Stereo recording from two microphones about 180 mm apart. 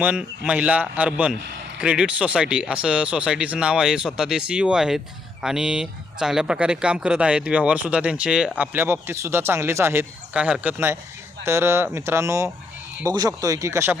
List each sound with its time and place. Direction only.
0.0 s a man's voice: 5° right (ahead or behind)